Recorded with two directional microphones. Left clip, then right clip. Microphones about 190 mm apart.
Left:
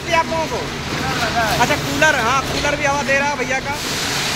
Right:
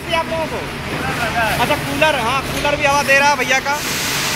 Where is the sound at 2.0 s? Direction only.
Centre (ahead or behind).